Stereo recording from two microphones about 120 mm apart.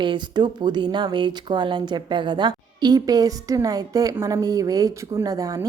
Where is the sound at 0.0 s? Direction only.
40° right (ahead or behind).